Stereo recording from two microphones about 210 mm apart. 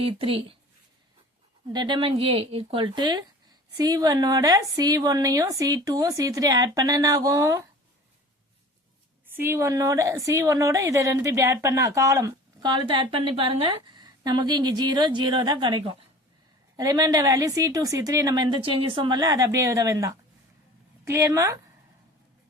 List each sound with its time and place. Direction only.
0.0 s a woman's voice: 25° right (ahead or behind)
1.7 s a woman's voice: 20° right (ahead or behind)
9.3 s a woman's voice: 10° right (ahead or behind)